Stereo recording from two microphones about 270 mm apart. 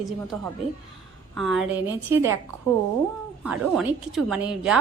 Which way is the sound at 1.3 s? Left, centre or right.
Centre.